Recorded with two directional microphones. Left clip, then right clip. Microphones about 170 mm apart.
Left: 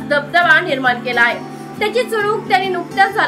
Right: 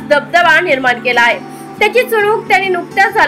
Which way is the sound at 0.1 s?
15° right (ahead or behind).